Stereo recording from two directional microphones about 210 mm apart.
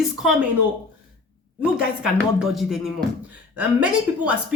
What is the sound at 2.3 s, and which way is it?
Speech, centre (ahead or behind).